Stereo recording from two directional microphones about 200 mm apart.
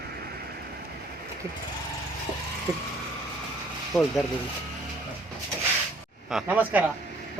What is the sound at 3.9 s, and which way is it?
Speech, centre (ahead or behind).